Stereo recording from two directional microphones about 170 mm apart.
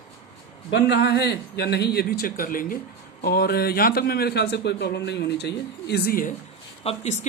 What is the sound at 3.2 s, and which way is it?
A man's voice, 65° left (ahead or behind).